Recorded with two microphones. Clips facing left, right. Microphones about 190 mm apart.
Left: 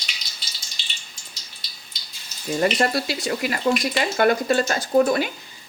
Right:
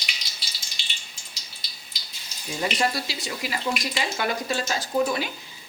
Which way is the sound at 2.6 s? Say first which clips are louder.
Left 5 dB; 60° left (ahead or behind).